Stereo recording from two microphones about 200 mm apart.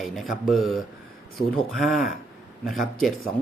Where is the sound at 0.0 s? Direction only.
Centre (ahead or behind).